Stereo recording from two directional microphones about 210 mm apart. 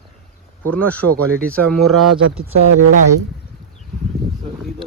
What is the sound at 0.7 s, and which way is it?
Speech, 5° left (ahead or behind).